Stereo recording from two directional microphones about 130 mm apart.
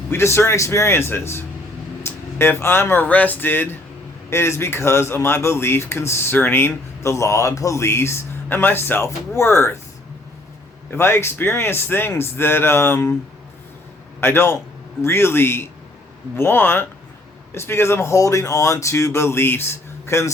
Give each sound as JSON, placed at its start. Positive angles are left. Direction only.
{"t": 0.1, "sound": "speech", "side_deg": 20}
{"t": 10.9, "sound": "speech", "side_deg": 20}
{"t": 14.2, "sound": "speech", "side_deg": 20}